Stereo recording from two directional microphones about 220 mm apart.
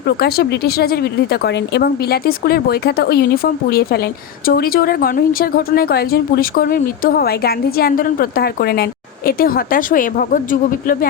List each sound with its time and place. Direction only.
0.0 s speech: 45° left (ahead or behind)